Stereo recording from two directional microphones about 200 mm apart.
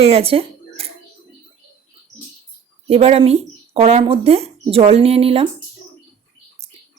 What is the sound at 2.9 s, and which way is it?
A woman's voice, 30° right (ahead or behind).